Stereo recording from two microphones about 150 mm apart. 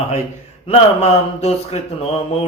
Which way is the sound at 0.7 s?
45° left (ahead or behind).